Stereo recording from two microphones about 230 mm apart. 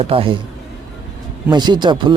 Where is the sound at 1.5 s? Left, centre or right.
Centre.